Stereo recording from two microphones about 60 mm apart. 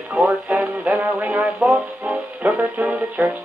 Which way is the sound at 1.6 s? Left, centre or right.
Centre.